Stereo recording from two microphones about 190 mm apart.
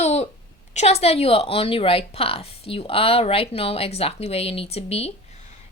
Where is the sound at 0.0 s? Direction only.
35° left (ahead or behind).